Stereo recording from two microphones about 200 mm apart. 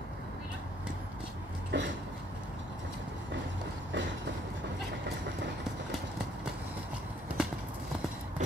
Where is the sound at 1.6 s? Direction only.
60° right (ahead or behind).